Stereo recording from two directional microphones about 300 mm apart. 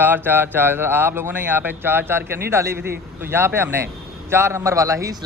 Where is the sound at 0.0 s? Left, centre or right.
Centre.